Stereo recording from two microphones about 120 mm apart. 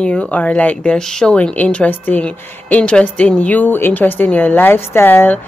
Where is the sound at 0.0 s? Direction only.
10° left (ahead or behind).